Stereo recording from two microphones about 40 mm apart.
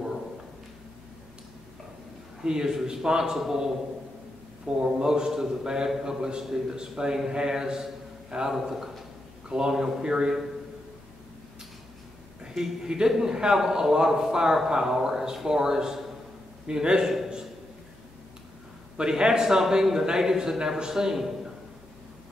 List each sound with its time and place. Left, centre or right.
2.4 s a man's voice: centre
12.5 s a man's voice: centre
18.9 s a man's voice: centre